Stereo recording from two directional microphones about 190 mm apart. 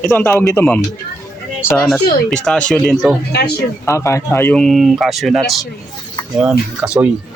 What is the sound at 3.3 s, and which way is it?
Speech, 60° left (ahead or behind).